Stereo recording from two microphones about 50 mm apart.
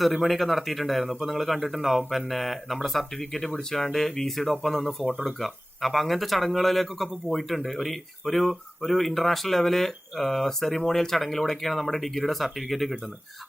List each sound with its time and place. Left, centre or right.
0.0 s speech: centre